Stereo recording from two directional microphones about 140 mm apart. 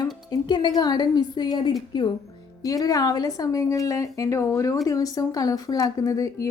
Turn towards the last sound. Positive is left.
turn(degrees=25)  # may be behind; listen again after turning